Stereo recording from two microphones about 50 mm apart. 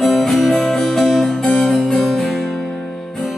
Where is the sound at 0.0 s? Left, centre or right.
Centre.